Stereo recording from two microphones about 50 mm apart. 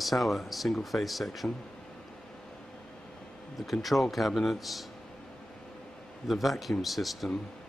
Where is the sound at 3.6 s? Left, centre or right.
Centre.